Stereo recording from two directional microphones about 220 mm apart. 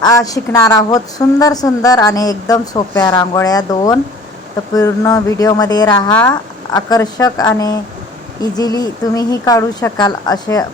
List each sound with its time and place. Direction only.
0.0 s a woman's voice: 15° left (ahead or behind)